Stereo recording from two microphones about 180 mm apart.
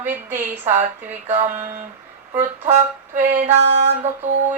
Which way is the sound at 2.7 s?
40° right (ahead or behind).